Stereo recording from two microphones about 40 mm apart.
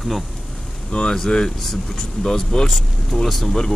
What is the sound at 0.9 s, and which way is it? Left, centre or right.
Speech, left.